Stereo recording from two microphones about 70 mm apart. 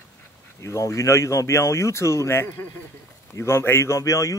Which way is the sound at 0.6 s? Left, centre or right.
Left.